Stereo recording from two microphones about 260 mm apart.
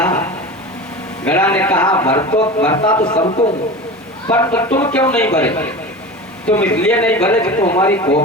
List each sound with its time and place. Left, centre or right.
0.0 s a sound: centre
1.2 s a man's voice: centre; by 3.5 s left
4.3 s a man's voice: centre